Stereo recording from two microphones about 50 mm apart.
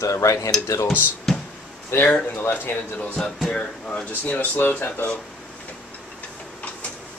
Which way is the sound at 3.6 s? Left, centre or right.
Left.